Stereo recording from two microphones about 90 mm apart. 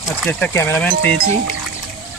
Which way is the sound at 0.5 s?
30° left (ahead or behind).